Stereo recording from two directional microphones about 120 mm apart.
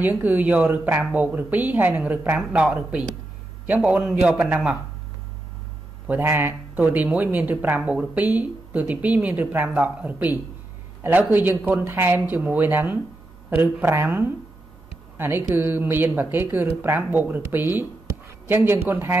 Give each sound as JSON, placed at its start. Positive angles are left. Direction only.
{"t": 0.0, "sound": "speech", "side_deg": -15}
{"t": 6.0, "sound": "speech", "side_deg": -15}